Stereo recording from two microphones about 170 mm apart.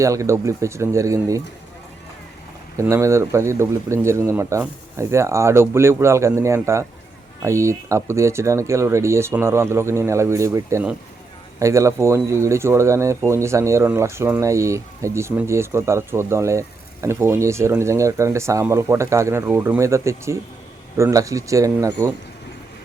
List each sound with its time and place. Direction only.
0.0 s speech: 20° right (ahead or behind)
2.7 s speech: 15° right (ahead or behind)